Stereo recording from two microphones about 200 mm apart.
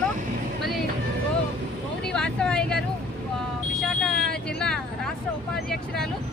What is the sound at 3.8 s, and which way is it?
Speech, 5° left (ahead or behind).